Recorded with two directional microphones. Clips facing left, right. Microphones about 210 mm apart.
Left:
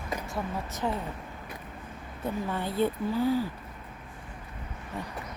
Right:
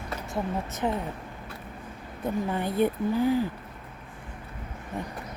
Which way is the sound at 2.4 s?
15° right (ahead or behind).